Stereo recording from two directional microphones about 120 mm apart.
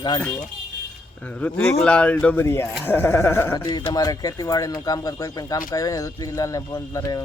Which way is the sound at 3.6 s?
35° left (ahead or behind).